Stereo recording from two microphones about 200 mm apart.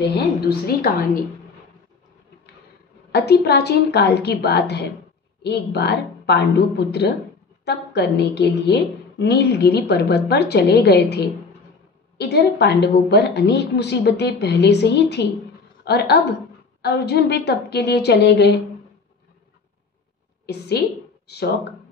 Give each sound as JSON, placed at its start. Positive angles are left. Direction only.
{"t": 0.0, "sound": "a woman's voice", "side_deg": 55}
{"t": 3.1, "sound": "a woman's voice", "side_deg": 55}
{"t": 20.4, "sound": "a woman's voice", "side_deg": 55}